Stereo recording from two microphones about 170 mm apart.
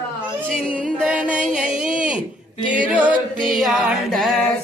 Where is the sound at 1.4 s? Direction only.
5° right (ahead or behind).